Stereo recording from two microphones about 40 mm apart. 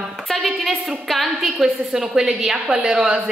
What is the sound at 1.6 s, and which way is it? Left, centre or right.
A woman's voice, centre.